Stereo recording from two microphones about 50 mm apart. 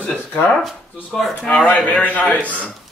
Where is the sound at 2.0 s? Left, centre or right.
Left.